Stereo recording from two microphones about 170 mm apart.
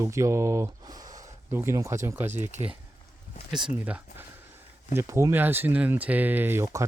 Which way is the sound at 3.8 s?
5° right (ahead or behind).